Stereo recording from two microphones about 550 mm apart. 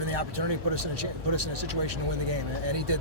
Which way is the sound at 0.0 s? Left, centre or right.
Right.